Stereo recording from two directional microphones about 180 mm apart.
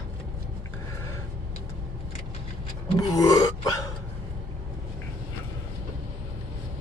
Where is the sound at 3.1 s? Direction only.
20° left (ahead or behind).